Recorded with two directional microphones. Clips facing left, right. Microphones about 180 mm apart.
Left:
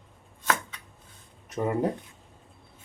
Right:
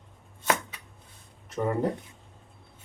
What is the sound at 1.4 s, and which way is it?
Speech, 20° left (ahead or behind).